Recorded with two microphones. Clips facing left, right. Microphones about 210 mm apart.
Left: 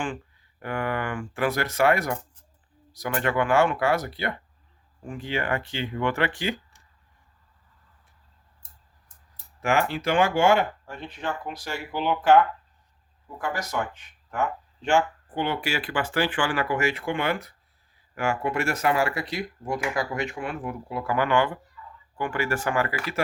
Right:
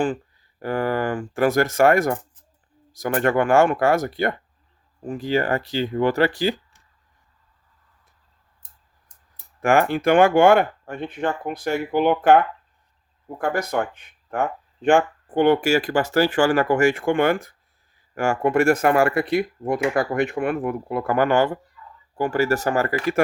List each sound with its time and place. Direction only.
0.6 s speech: 35° right (ahead or behind)
9.6 s speech: 50° right (ahead or behind)